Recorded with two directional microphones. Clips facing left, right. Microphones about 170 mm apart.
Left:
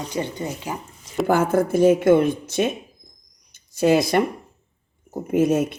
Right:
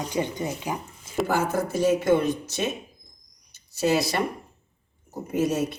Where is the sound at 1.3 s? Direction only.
55° left (ahead or behind).